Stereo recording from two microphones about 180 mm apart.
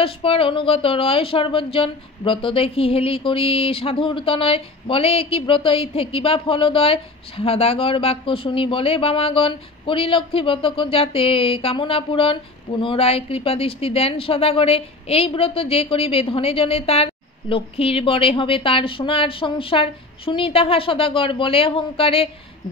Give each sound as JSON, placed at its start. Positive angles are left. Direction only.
{"t": 0.0, "sound": "speech", "side_deg": 30}